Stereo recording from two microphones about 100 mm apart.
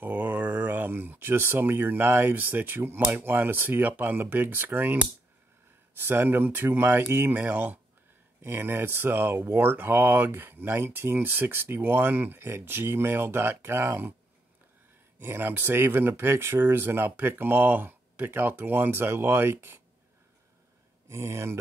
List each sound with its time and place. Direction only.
0.0 s speech: 15° right (ahead or behind)
5.9 s speech: 20° right (ahead or behind)
15.1 s speech: 20° right (ahead or behind)
21.1 s speech: 30° right (ahead or behind)